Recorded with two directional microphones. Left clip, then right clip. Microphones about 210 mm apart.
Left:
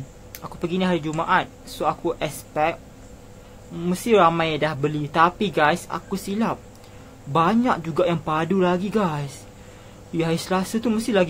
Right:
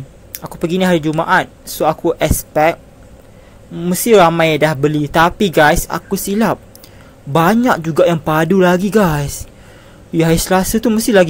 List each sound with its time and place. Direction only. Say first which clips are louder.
0.3 s speech: right 9 dB; 30° right (ahead or behind)